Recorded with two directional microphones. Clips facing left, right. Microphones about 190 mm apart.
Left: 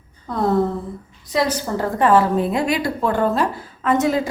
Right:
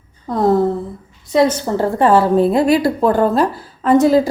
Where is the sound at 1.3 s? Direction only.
25° right (ahead or behind).